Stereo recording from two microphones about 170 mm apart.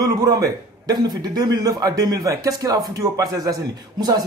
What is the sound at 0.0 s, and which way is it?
Speech, 20° right (ahead or behind).